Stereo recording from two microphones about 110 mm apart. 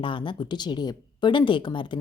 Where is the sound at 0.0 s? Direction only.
50° left (ahead or behind).